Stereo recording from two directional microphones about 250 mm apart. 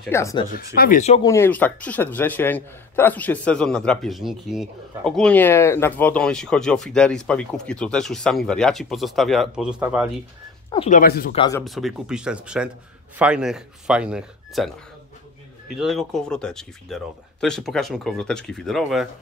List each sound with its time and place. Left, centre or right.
0.0 s speech: centre
0.7 s speech: left
1.2 s a man's voice: centre
10.7 s speech: left
11.0 s speech: left
11.3 s speech: centre
11.6 s a man's voice: centre
15.7 s a man's voice: centre